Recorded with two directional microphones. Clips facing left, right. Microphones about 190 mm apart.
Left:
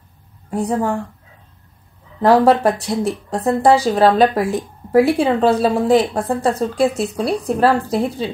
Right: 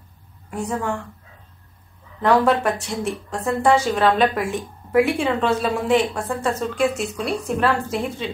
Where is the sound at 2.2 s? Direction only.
35° left (ahead or behind).